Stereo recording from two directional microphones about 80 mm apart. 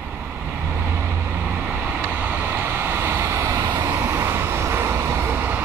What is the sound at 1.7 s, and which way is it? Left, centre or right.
Vehicle, right.